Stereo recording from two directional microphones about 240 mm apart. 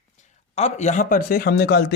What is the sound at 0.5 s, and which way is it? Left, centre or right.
A man's voice, left.